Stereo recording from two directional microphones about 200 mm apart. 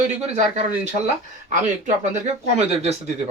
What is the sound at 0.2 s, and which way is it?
Speech, 30° right (ahead or behind).